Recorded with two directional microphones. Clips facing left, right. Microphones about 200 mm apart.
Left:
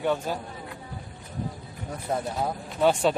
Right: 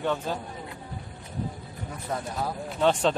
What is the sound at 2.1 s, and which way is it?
Speech, 30° left (ahead or behind).